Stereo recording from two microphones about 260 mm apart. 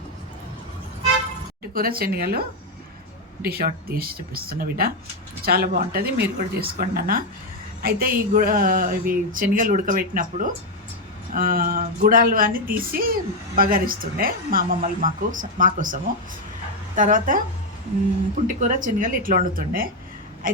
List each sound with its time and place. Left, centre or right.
1.7 s speech: right
18.6 s speech: right